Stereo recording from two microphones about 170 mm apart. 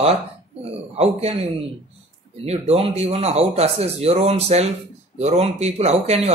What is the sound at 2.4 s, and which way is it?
A man's voice, 35° right (ahead or behind).